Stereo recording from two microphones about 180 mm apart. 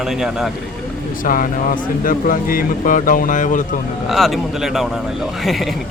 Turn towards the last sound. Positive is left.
turn(degrees=0)  # may be behind; listen again after turning